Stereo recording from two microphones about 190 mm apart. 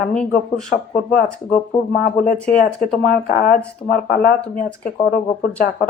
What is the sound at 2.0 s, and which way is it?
Speech, 45° left (ahead or behind).